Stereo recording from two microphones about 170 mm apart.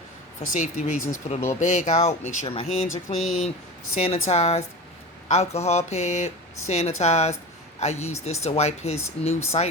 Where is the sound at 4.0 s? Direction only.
40° left (ahead or behind).